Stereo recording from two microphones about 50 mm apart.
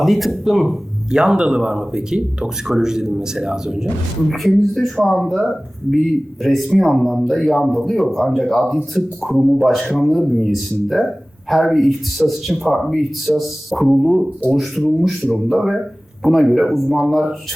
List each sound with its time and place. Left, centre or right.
0.0 s speech: centre
1.1 s speech: centre
4.3 s speech: centre